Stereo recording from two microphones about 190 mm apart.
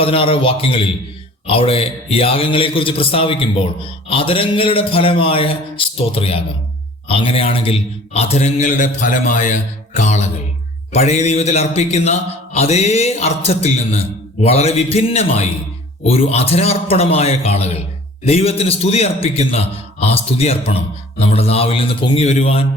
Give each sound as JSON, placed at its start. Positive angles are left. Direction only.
{"t": 0.0, "sound": "a man's voice", "side_deg": 30}